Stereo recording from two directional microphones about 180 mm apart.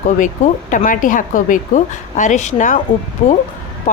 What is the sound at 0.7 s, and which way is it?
A woman's voice, 45° left (ahead or behind).